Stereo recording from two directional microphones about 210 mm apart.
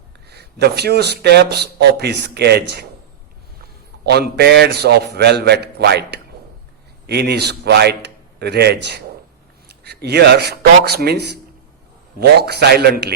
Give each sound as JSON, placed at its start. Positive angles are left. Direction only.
{"t": 0.3, "sound": "a man's voice", "side_deg": -50}
{"t": 4.0, "sound": "a man's voice", "side_deg": -50}